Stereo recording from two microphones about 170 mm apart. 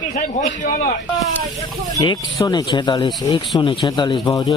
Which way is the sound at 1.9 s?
20° left (ahead or behind).